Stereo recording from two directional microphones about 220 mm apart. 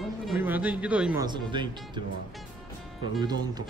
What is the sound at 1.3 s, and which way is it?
Speech, 20° right (ahead or behind).